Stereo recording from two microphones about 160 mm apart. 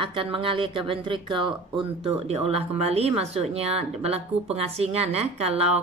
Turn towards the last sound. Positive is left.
turn(degrees=-40)  # may be behind; listen again after turning